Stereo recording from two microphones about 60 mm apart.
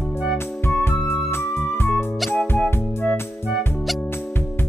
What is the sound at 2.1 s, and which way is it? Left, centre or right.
Music, centre.